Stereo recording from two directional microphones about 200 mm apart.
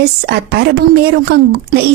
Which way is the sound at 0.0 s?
55° right (ahead or behind).